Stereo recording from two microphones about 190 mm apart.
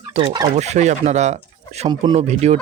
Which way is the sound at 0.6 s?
35° right (ahead or behind).